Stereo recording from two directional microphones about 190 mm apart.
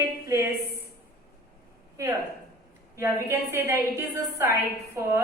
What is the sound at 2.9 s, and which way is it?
A woman's voice, 15° right (ahead or behind).